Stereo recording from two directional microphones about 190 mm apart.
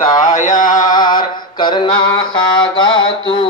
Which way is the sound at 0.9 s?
25° left (ahead or behind).